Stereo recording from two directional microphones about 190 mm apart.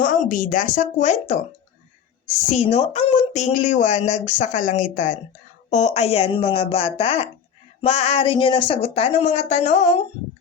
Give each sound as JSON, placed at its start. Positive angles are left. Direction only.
{"t": 0.0, "sound": "speech", "side_deg": 45}
{"t": 2.5, "sound": "a woman's voice", "side_deg": 30}